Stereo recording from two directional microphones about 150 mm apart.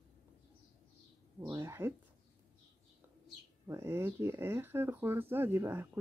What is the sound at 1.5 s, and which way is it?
Speech, 20° right (ahead or behind).